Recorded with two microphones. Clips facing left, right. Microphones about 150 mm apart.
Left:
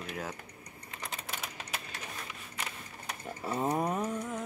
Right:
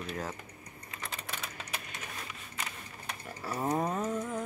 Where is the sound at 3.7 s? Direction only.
10° left (ahead or behind).